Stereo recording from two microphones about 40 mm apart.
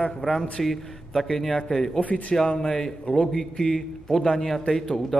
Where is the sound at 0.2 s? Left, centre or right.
Left.